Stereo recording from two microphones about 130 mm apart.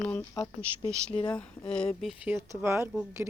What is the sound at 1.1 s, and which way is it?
Speech, 40° left (ahead or behind).